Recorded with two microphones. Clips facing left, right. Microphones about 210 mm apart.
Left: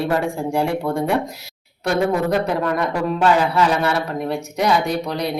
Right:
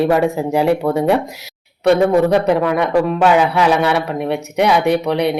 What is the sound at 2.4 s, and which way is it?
Speech, 65° right (ahead or behind).